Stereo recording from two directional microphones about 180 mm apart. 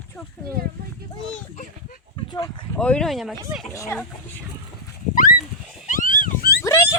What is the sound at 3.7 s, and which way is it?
Speech, 15° left (ahead or behind).